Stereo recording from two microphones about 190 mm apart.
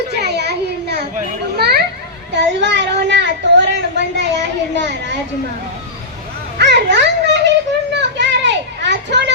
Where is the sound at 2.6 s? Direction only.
70° right (ahead or behind).